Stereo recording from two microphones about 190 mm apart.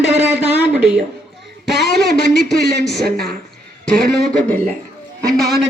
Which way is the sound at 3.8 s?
5° left (ahead or behind).